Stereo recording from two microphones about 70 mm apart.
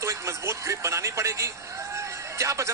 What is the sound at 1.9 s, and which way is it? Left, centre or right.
Music, right.